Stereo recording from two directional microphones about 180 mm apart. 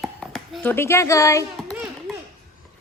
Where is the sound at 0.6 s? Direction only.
10° left (ahead or behind).